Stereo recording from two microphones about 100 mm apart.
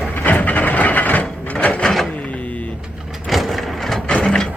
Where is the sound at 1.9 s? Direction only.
Centre (ahead or behind).